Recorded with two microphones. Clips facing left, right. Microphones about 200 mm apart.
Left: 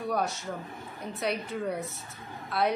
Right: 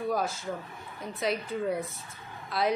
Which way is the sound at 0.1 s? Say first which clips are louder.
Even; centre (ahead or behind).